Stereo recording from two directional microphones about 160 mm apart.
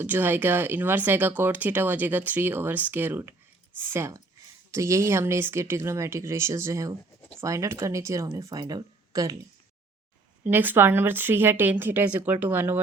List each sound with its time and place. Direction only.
0.0 s speech: 10° right (ahead or behind)
10.4 s speech: 10° right (ahead or behind)